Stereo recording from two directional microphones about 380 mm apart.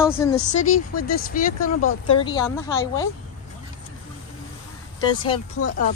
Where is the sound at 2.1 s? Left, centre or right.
Centre.